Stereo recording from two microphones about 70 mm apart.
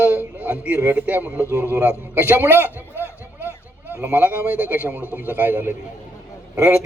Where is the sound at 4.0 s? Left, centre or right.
Right.